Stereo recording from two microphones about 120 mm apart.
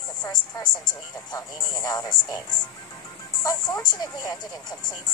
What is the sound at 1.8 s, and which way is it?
Speech, 30° left (ahead or behind).